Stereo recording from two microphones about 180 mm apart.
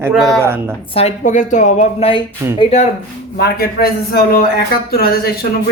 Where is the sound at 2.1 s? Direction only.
30° left (ahead or behind).